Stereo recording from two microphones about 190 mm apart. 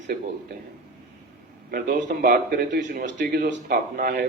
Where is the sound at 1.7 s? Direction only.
45° right (ahead or behind).